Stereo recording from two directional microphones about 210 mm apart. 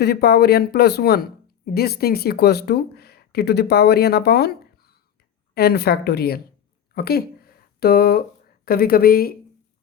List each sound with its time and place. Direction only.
0.0 s a woman's voice: 50° left (ahead or behind)
6.9 s a sound: 50° left (ahead or behind)
8.6 s a woman's voice: 45° left (ahead or behind)